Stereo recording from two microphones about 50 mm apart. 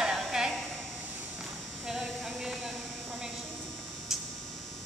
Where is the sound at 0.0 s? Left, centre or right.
Centre.